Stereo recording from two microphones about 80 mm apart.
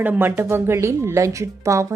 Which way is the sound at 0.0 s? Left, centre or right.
Right.